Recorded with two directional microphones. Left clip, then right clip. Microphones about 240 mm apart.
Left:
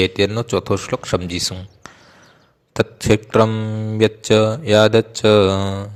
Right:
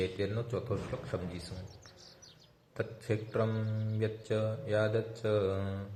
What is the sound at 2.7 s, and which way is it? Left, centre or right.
Speech, left.